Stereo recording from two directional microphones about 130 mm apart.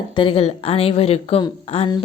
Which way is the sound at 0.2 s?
40° left (ahead or behind).